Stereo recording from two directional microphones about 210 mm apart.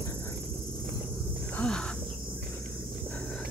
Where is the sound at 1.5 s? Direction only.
5° left (ahead or behind).